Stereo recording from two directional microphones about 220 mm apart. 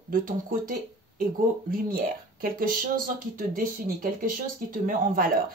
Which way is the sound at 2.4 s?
40° right (ahead or behind).